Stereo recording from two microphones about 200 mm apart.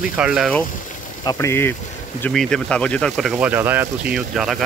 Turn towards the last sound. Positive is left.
turn(degrees=0)  # may be behind; listen again after turning